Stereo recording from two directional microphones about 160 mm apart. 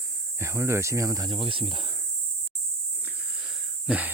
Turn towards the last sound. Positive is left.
turn(degrees=-10)  # may be behind; listen again after turning